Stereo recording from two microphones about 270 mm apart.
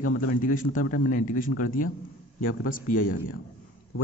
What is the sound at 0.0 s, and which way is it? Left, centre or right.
Speech, left.